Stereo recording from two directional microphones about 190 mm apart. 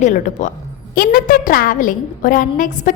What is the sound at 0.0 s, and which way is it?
A woman's voice, 40° left (ahead or behind).